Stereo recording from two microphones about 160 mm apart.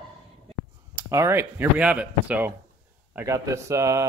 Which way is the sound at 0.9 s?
15° right (ahead or behind).